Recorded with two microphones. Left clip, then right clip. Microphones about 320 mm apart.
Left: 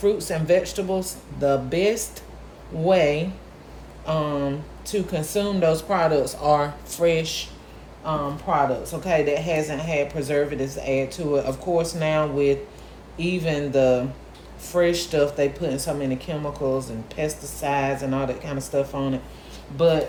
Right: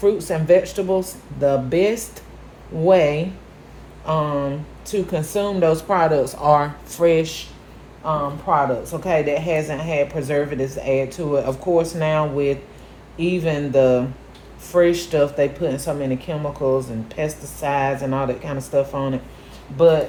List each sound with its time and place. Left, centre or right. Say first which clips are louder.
0.0 s a woman's voice: right 3 dB; centre